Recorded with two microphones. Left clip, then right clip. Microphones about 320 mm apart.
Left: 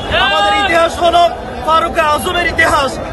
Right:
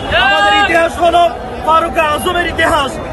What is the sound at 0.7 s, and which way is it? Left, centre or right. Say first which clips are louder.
A man's voice: even; centre.